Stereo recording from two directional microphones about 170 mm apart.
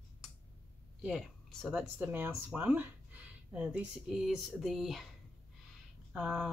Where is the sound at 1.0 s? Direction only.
Centre (ahead or behind).